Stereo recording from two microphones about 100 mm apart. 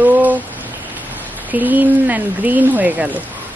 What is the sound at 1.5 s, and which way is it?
Speech, 15° right (ahead or behind).